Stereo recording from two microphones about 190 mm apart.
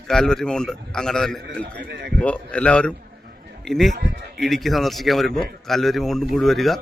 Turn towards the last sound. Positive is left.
turn(degrees=0)  # may be behind; listen again after turning